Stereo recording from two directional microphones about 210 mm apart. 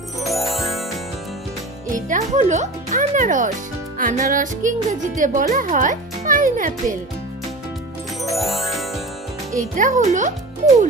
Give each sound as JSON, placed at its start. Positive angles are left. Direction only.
{"t": 0.2, "sound": "music", "side_deg": 0}
{"t": 1.9, "sound": "speech", "side_deg": -40}
{"t": 8.2, "sound": "music", "side_deg": 0}
{"t": 9.6, "sound": "a child's voice", "side_deg": -40}